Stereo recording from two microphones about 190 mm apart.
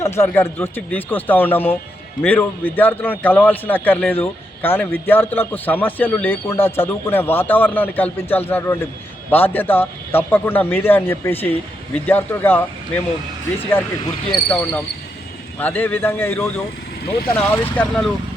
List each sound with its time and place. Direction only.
0.0 s a man's voice: 15° left (ahead or behind)
14.3 s a man's voice: 10° left (ahead or behind)